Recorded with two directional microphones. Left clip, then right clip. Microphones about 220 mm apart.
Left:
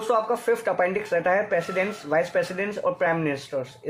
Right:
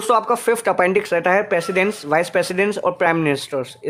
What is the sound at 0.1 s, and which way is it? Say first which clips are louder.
Speech: right 6 dB; 50° right (ahead or behind).